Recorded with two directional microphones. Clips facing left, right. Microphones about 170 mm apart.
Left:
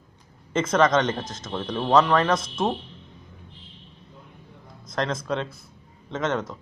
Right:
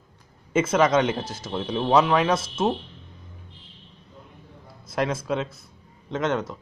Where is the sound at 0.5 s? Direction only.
10° right (ahead or behind).